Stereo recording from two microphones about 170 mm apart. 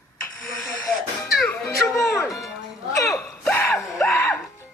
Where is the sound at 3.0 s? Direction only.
15° left (ahead or behind).